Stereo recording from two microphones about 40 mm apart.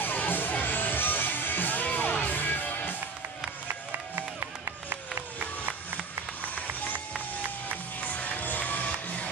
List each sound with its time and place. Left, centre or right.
0.0 s music: left
3.6 s music: right
8.0 s music: left